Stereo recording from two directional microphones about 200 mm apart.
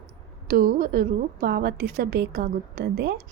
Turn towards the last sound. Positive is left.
turn(degrees=-55)  # may be behind; listen again after turning